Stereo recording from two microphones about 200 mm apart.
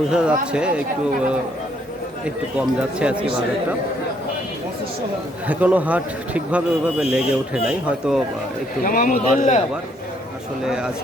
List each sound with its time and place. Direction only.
0.1 s speech: 5° right (ahead or behind)
2.6 s speech: 5° right (ahead or behind)
5.5 s a man's voice: 5° right (ahead or behind)
8.8 s speech: 45° left (ahead or behind)
10.7 s speech: 5° right (ahead or behind)